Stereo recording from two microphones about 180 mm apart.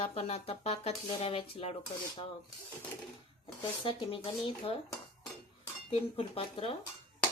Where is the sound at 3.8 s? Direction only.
30° left (ahead or behind).